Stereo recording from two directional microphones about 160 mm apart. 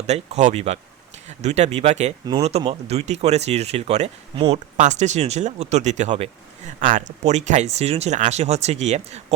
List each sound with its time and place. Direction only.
0.1 s speech: 45° right (ahead or behind)
6.7 s speech: 55° right (ahead or behind)